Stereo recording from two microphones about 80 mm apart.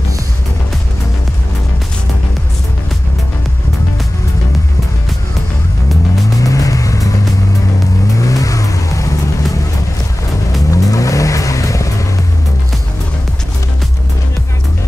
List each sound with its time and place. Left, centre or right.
6.4 s vehicle: left
8.2 s vehicle: left
10.7 s vehicle: left